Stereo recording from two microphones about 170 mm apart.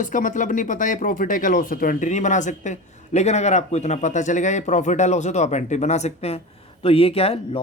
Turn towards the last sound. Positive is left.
turn(degrees=35)  # may be behind; listen again after turning